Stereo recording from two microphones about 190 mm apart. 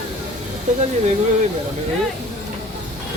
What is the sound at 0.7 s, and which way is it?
Speech, 40° right (ahead or behind).